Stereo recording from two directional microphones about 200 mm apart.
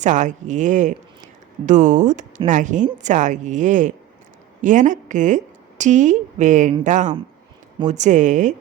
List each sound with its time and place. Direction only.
0.0 s a woman's voice: 40° right (ahead or behind)